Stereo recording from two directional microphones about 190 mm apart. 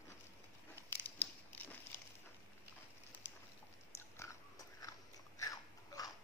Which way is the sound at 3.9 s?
15° left (ahead or behind).